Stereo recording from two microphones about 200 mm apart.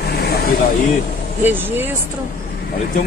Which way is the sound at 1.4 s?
10° right (ahead or behind).